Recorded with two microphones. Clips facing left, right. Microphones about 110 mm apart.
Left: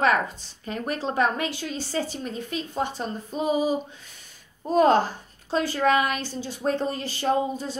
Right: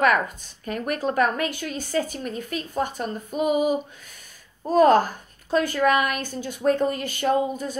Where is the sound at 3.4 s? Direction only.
30° left (ahead or behind).